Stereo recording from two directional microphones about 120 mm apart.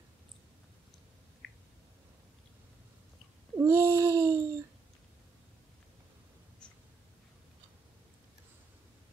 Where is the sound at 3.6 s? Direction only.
20° right (ahead or behind).